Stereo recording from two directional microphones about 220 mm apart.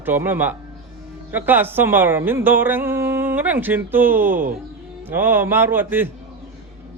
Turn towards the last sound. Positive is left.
turn(degrees=-10)  # may be behind; listen again after turning